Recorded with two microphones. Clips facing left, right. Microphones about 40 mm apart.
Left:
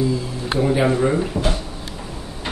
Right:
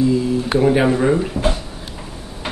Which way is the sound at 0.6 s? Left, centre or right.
Centre.